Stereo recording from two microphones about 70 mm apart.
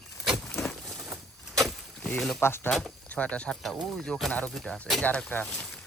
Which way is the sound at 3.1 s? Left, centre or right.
Left.